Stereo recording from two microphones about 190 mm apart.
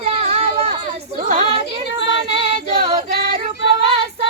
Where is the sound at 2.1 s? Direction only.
30° right (ahead or behind).